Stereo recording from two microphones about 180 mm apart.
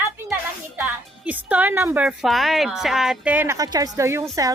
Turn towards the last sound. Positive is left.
turn(degrees=-15)  # may be behind; listen again after turning